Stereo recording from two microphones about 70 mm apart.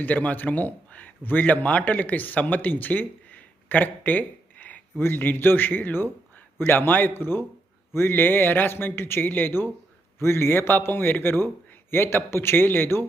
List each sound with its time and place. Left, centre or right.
0.0 s a man's voice: left